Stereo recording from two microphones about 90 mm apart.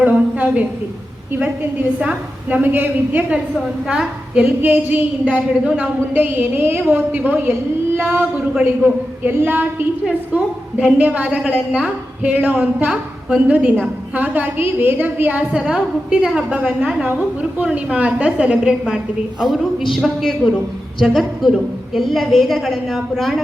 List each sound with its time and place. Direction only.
0.0 s a woman's voice: 15° right (ahead or behind)
2.0 s a woman's voice: 15° right (ahead or behind); by 23.4 s centre (ahead or behind)